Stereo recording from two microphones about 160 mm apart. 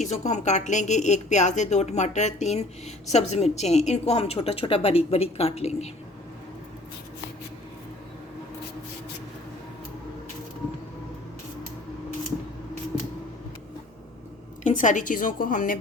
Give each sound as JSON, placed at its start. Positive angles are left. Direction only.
{"t": 0.0, "sound": "a woman's voice", "side_deg": 45}
{"t": 14.6, "sound": "a woman's voice", "side_deg": 50}